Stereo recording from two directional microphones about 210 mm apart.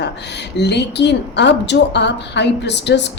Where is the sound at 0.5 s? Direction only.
55° left (ahead or behind).